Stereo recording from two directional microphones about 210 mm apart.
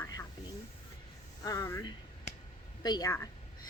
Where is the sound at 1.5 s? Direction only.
15° left (ahead or behind).